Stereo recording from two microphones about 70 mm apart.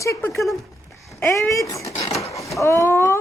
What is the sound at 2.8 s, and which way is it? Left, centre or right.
Speech, left.